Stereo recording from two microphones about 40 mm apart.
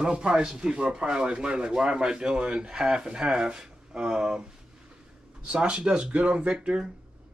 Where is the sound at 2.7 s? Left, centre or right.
Centre.